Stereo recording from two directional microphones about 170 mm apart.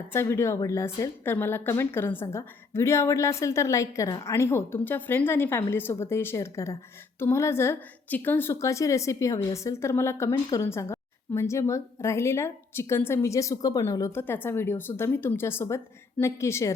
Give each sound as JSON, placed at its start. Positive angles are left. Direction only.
{"t": 0.1, "sound": "a woman's voice", "side_deg": 15}